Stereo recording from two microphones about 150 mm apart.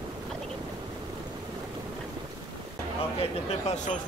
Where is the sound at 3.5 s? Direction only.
45° left (ahead or behind).